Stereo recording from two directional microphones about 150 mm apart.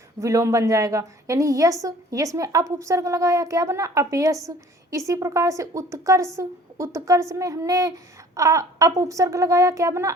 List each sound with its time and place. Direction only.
0.2 s a woman's voice: 20° right (ahead or behind)